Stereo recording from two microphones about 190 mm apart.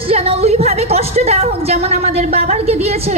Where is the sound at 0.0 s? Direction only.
30° right (ahead or behind).